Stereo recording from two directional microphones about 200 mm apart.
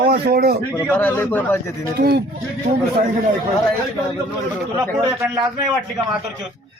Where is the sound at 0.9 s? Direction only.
10° left (ahead or behind).